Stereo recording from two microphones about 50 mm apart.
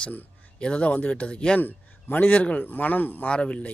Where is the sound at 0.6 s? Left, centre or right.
Left.